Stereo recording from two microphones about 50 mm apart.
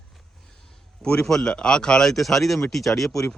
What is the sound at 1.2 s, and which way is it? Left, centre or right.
Speech, centre.